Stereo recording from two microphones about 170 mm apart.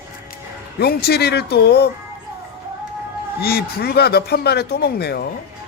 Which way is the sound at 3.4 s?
65° left (ahead or behind).